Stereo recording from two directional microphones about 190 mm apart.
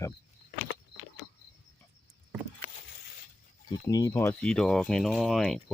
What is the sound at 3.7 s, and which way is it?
Speech, 20° left (ahead or behind).